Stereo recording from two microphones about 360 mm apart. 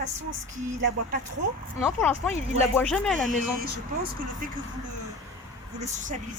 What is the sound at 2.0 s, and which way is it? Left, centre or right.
Speech, centre.